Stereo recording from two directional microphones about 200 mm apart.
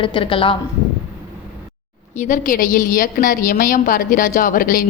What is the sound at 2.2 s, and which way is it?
A woman's voice, 40° left (ahead or behind).